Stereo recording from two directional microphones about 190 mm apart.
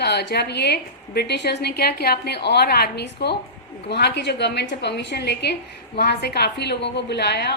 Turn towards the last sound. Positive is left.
turn(degrees=60)  # may be behind; listen again after turning